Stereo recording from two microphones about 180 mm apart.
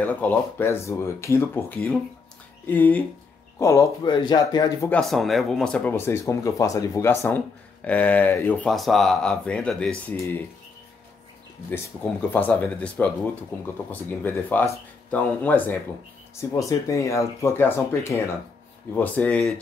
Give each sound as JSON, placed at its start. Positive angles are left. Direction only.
{"t": 0.0, "sound": "speech", "side_deg": 10}
{"t": 12.3, "sound": "speech", "side_deg": 10}
{"t": 14.2, "sound": "speech", "side_deg": 10}